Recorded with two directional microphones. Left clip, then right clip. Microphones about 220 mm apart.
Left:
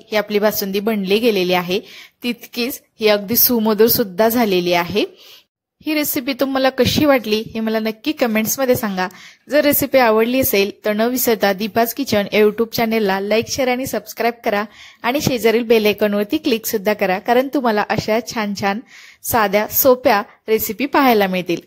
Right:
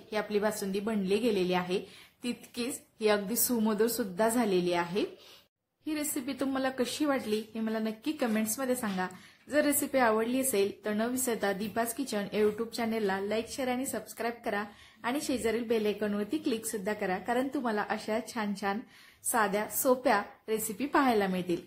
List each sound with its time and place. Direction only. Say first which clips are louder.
0.1 s a woman's voice: left 14 dB; 35° left (ahead or behind)